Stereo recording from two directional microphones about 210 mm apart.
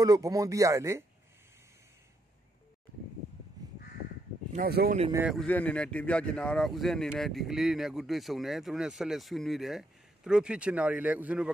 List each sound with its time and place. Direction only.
0.0 s speech: 15° right (ahead or behind)
4.5 s speech: 45° right (ahead or behind)
5.1 s speech: 5° right (ahead or behind)